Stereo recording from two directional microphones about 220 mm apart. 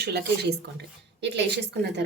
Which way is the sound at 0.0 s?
50° right (ahead or behind).